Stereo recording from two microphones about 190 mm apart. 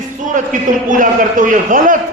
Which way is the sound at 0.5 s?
40° right (ahead or behind).